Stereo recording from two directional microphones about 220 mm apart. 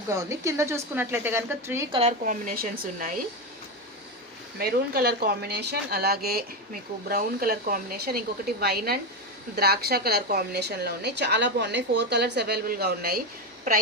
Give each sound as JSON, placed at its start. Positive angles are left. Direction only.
{"t": 0.3, "sound": "speech", "side_deg": -10}
{"t": 1.9, "sound": "speech", "side_deg": -30}
{"t": 4.5, "sound": "speech", "side_deg": -45}